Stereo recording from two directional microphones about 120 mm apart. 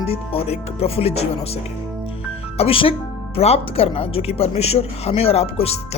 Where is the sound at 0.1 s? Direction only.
55° left (ahead or behind).